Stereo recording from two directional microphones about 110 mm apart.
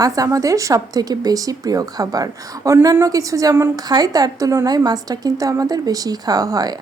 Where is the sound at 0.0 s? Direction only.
30° right (ahead or behind).